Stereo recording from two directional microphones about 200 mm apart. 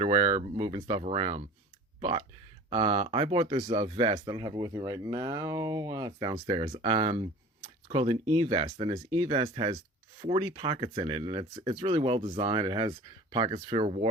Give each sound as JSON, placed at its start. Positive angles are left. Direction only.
{"t": 0.0, "sound": "speech", "side_deg": -30}